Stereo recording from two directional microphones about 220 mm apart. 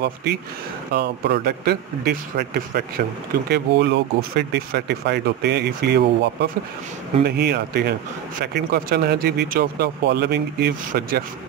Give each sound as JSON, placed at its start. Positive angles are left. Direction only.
{"t": 0.0, "sound": "speech", "side_deg": -50}